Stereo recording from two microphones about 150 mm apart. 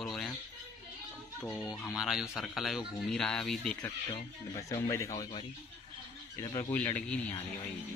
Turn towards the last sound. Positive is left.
turn(degrees=15)  # may be behind; listen again after turning